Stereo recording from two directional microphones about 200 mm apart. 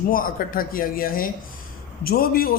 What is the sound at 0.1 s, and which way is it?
A man's voice, 45° left (ahead or behind).